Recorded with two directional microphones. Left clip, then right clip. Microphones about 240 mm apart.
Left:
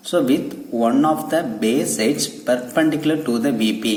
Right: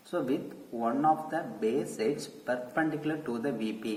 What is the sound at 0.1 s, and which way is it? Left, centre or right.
A man's voice, left.